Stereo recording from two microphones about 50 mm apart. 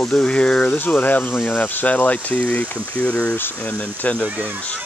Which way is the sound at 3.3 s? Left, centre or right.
Left.